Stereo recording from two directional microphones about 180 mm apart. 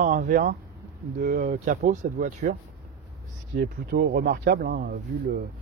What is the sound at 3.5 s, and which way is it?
Speech, 60° right (ahead or behind).